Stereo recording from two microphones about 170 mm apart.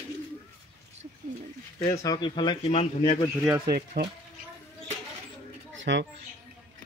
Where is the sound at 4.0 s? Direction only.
70° right (ahead or behind).